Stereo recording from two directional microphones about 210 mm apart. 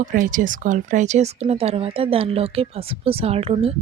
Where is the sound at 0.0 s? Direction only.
40° right (ahead or behind).